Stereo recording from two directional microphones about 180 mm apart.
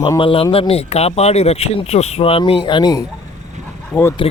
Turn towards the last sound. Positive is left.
turn(degrees=30)  # may be behind; listen again after turning